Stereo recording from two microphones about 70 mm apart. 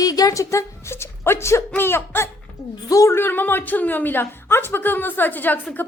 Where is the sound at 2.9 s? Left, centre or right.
Left.